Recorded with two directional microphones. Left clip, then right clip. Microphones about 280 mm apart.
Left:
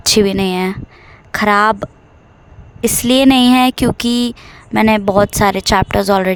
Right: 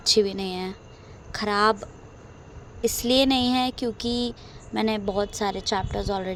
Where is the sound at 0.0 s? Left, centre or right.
Left.